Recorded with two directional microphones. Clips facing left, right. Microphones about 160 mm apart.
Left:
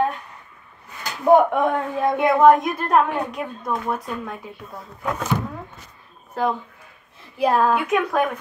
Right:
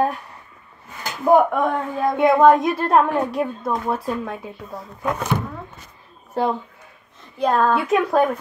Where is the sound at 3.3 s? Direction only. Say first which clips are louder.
Right 4 dB; 30° right (ahead or behind).